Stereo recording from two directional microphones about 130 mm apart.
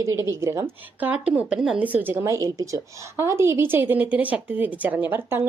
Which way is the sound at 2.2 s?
25° right (ahead or behind).